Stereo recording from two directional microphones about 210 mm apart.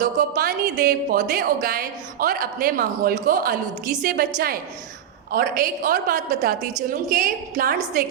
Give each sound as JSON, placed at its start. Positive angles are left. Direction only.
{"t": 0.0, "sound": "a woman's voice", "side_deg": -40}